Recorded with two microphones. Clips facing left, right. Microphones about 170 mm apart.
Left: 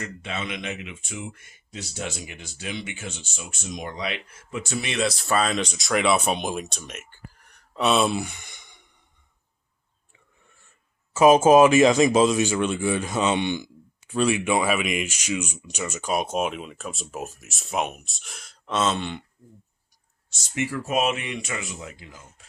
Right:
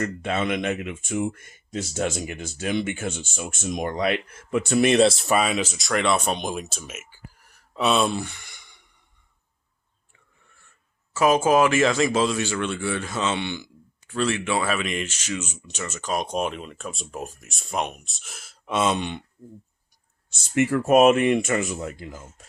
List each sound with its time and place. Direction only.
0.0 s speech: 50° right (ahead or behind)
4.9 s speech: 25° right (ahead or behind); by 8.8 s 20° left (ahead or behind)
11.1 s speech: 20° left (ahead or behind); by 19.2 s 15° right (ahead or behind)
20.3 s speech: 55° right (ahead or behind)